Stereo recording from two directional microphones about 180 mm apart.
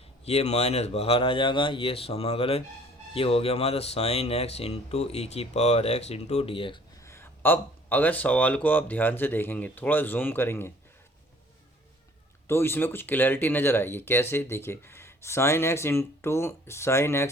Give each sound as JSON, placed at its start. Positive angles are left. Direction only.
{"t": 0.3, "sound": "speech", "side_deg": 35}
{"t": 7.0, "sound": "speech", "side_deg": 15}
{"t": 12.5, "sound": "speech", "side_deg": 15}